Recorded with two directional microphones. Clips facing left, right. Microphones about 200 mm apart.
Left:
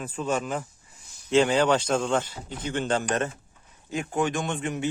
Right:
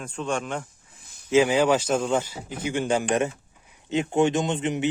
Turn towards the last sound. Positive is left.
turn(degrees=-20)  # may be behind; listen again after turning